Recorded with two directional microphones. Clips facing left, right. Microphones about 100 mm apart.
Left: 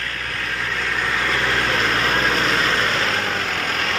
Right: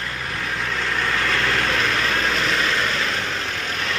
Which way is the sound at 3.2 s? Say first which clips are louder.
Left 3 dB; 50° left (ahead or behind).